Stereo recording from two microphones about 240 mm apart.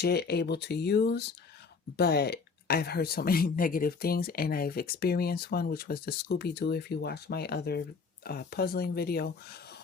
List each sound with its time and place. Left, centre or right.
0.0 s speech: left